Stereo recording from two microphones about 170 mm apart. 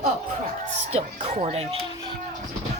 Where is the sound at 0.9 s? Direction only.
35° right (ahead or behind).